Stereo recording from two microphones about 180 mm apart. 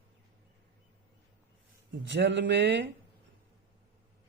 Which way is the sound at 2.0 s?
75° right (ahead or behind).